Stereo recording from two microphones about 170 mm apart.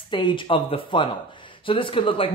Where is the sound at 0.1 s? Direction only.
30° left (ahead or behind).